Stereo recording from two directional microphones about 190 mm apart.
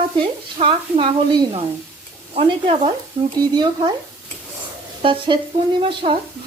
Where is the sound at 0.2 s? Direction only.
25° right (ahead or behind).